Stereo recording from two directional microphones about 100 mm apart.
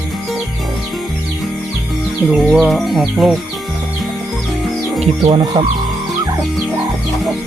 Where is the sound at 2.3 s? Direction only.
Centre (ahead or behind).